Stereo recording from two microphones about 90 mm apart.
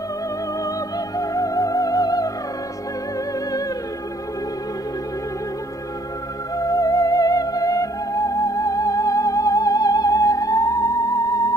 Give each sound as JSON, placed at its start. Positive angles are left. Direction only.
{"t": 0.7, "sound": "music", "side_deg": 40}
{"t": 6.5, "sound": "theremin", "side_deg": 40}